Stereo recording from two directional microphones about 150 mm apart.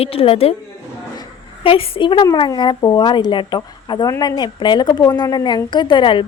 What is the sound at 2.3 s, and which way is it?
Speech, 30° left (ahead or behind).